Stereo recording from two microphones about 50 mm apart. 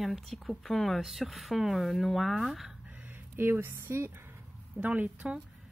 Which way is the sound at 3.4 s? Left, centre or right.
Right.